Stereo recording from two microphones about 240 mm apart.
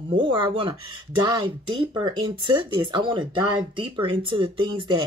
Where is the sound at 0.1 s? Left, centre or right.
Centre.